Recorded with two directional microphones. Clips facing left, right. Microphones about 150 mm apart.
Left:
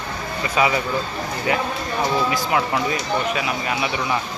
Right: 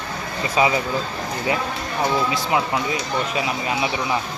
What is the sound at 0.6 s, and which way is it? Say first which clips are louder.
Speech: right 1 dB; 30° right (ahead or behind).